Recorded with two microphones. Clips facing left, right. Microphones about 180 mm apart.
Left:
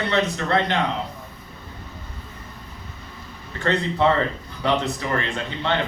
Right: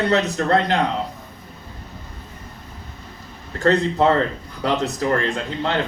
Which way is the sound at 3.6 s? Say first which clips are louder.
Right 4 dB; 45° right (ahead or behind).